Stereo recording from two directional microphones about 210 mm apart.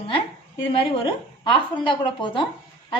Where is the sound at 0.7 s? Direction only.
25° left (ahead or behind).